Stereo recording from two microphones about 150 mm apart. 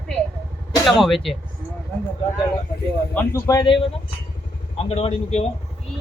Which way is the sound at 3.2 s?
20° left (ahead or behind).